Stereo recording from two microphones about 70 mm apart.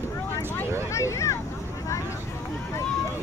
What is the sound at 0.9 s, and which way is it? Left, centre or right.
Speech, left.